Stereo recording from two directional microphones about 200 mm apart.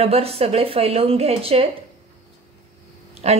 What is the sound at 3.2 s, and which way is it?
Speech, 30° right (ahead or behind).